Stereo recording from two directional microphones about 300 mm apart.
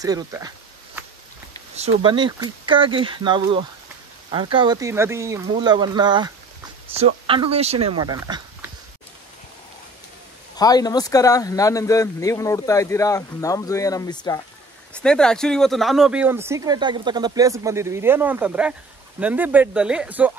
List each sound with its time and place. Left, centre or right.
0.0 s speech: centre
1.8 s speech: centre
10.5 s speech: centre